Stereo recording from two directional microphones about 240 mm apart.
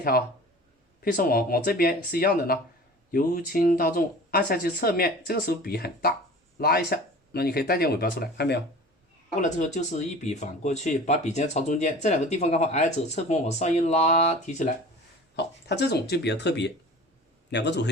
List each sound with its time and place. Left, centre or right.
1.0 s speech: left
9.3 s speech: left
15.4 s speech: left